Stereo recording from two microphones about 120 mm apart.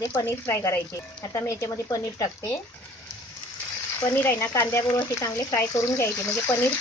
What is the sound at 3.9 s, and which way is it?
Speech, 20° left (ahead or behind).